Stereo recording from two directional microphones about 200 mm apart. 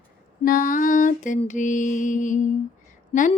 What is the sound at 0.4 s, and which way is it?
Mantra, 45° left (ahead or behind).